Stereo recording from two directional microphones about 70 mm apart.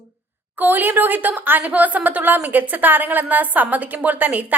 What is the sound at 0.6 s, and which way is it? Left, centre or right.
A woman's voice, right.